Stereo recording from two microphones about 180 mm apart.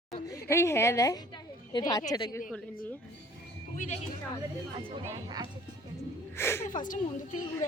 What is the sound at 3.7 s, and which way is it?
Speech, 40° left (ahead or behind).